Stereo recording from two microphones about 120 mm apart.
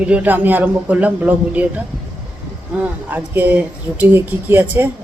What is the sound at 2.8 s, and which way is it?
Speech, 15° right (ahead or behind).